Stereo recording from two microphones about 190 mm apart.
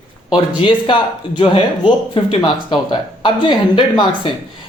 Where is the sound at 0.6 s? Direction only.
25° left (ahead or behind).